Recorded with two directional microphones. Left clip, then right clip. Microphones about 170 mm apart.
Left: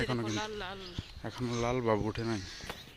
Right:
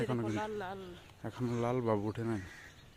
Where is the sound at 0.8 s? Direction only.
5° right (ahead or behind).